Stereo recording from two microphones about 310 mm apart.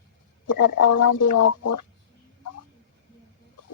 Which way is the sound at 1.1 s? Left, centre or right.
Left.